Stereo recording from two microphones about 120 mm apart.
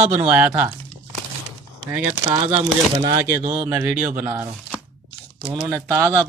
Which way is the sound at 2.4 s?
15° right (ahead or behind).